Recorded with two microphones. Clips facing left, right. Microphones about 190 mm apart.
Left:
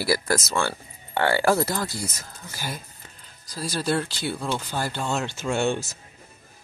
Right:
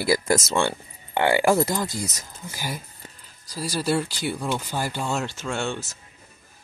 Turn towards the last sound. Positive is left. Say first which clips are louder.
# left 4 dB
turn(degrees=10)  # may be behind; listen again after turning